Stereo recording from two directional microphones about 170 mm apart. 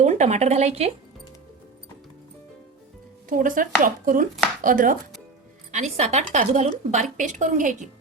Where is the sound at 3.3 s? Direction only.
50° right (ahead or behind).